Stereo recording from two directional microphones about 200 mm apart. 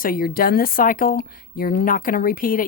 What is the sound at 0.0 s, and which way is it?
Speech, 45° left (ahead or behind).